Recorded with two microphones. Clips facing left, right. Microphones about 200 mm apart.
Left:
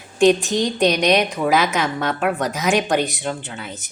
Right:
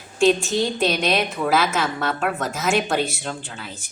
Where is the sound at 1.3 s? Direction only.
15° left (ahead or behind).